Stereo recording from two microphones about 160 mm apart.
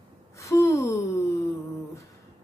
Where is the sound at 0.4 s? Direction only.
20° left (ahead or behind).